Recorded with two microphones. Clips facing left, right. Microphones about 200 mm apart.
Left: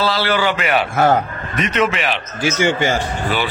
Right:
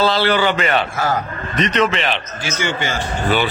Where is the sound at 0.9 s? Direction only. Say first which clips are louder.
Left 6 dB; 60° left (ahead or behind).